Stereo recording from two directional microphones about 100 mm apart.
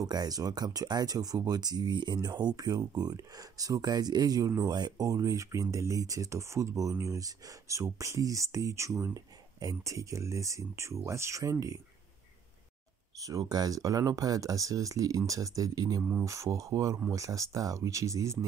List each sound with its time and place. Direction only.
0.0 s speech: 40° right (ahead or behind)
13.2 s speech: 35° right (ahead or behind)
16.0 s speech: 15° right (ahead or behind)
16.3 s speech: 30° right (ahead or behind)